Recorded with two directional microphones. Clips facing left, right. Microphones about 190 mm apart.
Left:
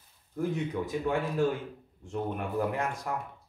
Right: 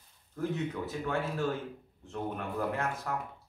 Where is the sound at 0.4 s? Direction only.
15° left (ahead or behind).